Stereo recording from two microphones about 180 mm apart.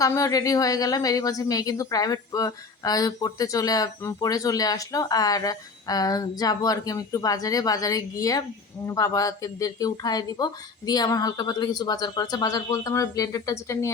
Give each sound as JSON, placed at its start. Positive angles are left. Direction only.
{"t": 0.0, "sound": "speech", "side_deg": 20}